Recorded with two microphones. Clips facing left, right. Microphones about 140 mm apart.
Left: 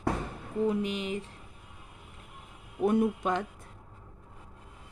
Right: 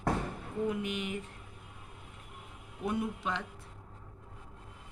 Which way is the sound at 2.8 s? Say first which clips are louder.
Left 8 dB; 50° left (ahead or behind).